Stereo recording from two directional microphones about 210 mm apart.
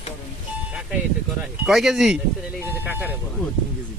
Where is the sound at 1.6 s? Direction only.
Centre (ahead or behind).